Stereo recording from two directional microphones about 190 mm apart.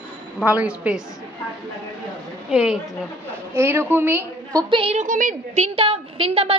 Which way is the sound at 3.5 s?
15° right (ahead or behind).